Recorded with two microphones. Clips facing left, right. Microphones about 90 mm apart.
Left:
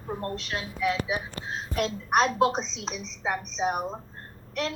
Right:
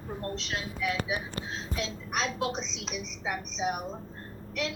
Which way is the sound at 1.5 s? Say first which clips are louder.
Left 9 dB; 55° left (ahead or behind).